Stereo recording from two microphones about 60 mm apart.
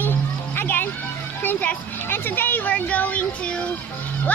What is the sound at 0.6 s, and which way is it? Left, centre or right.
Music, left.